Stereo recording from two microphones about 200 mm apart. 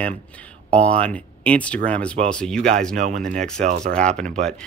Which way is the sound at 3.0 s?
40° right (ahead or behind).